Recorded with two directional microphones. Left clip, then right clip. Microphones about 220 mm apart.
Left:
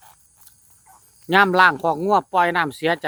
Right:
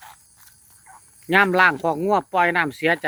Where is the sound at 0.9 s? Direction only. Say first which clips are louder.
Right 4 dB; 10° left (ahead or behind).